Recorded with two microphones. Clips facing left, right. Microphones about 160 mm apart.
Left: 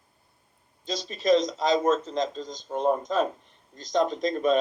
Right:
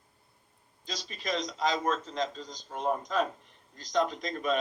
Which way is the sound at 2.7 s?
35° left (ahead or behind).